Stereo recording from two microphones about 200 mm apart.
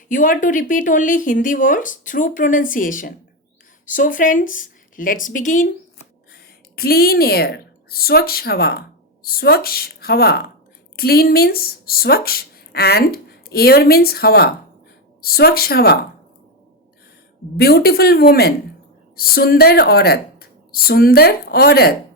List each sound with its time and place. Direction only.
0.1 s a woman's voice: 40° left (ahead or behind)
17.6 s a woman's voice: 50° left (ahead or behind)